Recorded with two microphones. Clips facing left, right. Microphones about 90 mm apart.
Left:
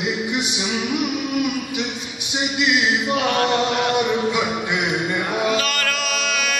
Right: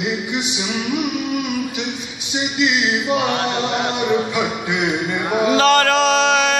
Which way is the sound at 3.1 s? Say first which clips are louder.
Right 1 dB; 20° right (ahead or behind).